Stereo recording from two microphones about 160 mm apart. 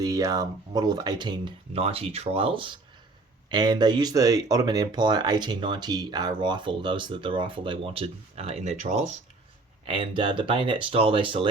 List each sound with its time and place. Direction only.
0.0 s speech: 20° right (ahead or behind); by 9.0 s 45° right (ahead or behind)
9.8 s speech: 30° right (ahead or behind)